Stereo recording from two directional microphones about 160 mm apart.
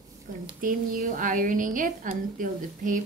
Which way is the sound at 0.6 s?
55° right (ahead or behind).